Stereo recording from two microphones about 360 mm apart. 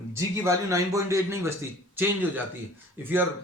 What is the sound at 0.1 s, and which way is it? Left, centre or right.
Speech, centre.